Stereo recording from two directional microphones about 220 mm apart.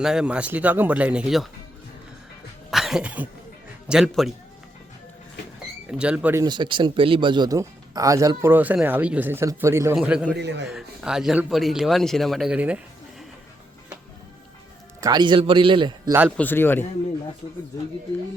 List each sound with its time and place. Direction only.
0.0 s speech: 5° right (ahead or behind)
2.6 s a sound: centre (ahead or behind)
3.8 s speech: 5° right (ahead or behind)
5.9 s speech: 5° right (ahead or behind)
6.4 s speech: 20° right (ahead or behind); by 10.2 s 5° right (ahead or behind)
10.3 s a man's voice: 50° right (ahead or behind)
10.7 s speech: 5° right (ahead or behind)
15.0 s a man's voice: 20° right (ahead or behind)
16.4 s a man's voice: 10° left (ahead or behind)